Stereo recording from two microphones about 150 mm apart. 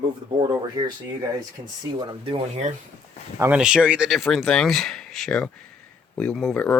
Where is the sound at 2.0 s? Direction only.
35° right (ahead or behind).